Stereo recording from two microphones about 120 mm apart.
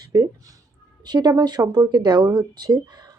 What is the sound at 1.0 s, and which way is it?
Speech, 35° right (ahead or behind).